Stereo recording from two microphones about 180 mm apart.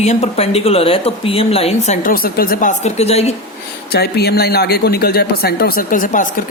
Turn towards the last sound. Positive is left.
turn(degrees=45)  # may be behind; listen again after turning